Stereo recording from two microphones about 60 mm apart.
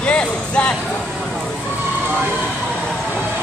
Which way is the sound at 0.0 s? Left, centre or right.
Centre.